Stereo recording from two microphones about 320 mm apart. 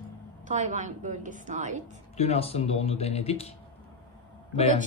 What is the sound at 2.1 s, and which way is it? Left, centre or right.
Speech, centre.